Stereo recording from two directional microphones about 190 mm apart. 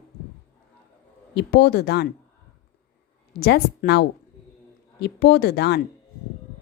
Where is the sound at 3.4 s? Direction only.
60° left (ahead or behind).